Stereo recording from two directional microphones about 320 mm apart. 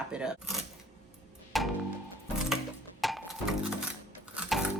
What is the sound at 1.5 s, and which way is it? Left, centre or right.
Music, centre.